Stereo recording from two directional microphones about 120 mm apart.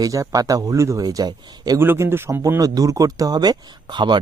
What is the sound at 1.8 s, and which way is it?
Speech, 20° right (ahead or behind).